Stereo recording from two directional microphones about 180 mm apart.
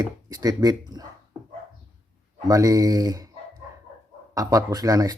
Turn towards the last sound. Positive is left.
turn(degrees=-20)  # may be behind; listen again after turning